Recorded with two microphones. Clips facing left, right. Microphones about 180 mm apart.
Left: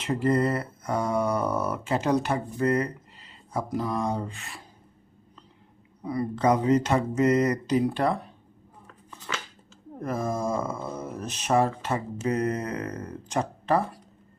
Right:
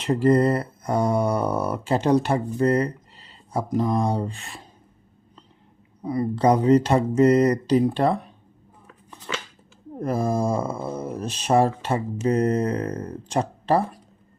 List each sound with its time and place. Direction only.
0.0 s speech: 35° right (ahead or behind)
6.0 s speech: 25° right (ahead or behind)
9.0 s a sound: 25° right (ahead or behind)
10.0 s speech: 30° right (ahead or behind)